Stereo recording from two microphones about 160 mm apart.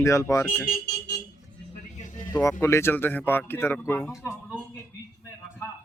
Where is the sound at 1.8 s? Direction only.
50° left (ahead or behind).